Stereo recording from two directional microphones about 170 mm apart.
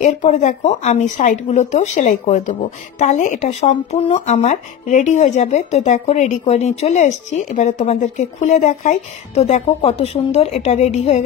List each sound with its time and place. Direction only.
0.0 s speech: 45° left (ahead or behind)